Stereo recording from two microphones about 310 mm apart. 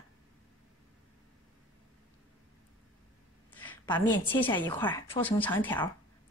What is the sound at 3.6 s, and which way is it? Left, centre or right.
A woman's voice, centre.